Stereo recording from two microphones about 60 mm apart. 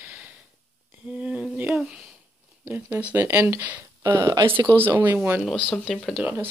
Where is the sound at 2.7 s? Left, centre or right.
Right.